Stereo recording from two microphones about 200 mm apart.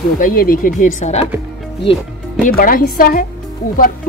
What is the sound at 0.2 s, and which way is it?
Speech, 45° left (ahead or behind).